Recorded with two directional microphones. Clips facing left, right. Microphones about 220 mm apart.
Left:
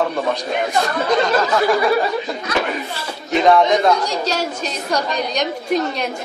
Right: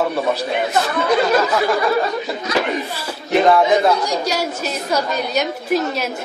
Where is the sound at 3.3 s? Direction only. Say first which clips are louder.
Even; centre (ahead or behind).